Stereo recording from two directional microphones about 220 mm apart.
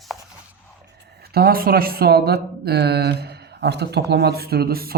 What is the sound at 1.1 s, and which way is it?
Speech, 45° right (ahead or behind).